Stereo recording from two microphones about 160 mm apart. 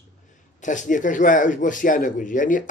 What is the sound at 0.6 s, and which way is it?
A man's voice, 50° left (ahead or behind).